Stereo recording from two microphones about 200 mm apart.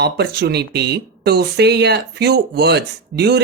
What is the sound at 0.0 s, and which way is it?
Speech, 55° right (ahead or behind).